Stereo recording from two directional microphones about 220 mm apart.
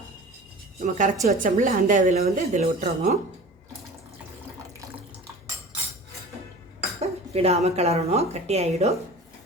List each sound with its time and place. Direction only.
0.8 s a woman's voice: 35° right (ahead or behind)
7.0 s a woman's voice: 30° right (ahead or behind)